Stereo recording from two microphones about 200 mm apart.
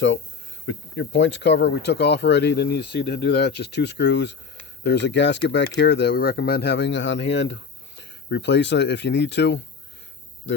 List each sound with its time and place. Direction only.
0.7 s speech: 65° left (ahead or behind)
10.5 s speech: 70° left (ahead or behind)